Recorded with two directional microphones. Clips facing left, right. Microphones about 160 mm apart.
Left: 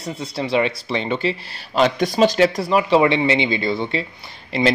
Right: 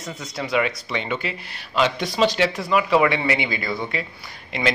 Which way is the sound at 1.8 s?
45° left (ahead or behind).